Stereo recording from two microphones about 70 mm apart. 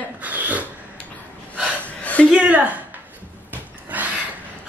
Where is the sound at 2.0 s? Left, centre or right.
Left.